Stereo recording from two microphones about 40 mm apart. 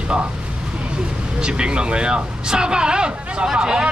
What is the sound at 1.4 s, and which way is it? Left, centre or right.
Speech, right.